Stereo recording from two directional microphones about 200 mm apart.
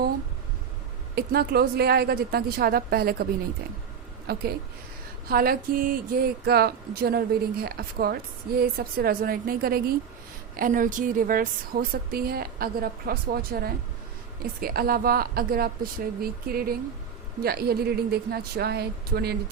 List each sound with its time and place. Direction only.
1.1 s a woman's voice: 50° right (ahead or behind)
4.3 s a woman's voice: 50° right (ahead or behind)